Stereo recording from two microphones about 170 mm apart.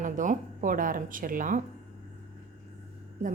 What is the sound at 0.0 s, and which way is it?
A woman's voice, 50° right (ahead or behind).